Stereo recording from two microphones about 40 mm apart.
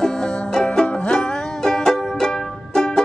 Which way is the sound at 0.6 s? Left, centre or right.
Left.